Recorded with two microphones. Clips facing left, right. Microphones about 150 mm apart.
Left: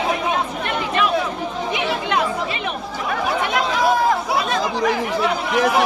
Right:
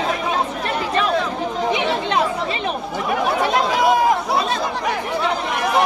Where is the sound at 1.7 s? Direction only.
25° right (ahead or behind).